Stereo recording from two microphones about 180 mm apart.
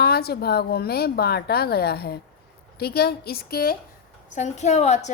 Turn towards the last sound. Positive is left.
turn(degrees=40)  # may be behind; listen again after turning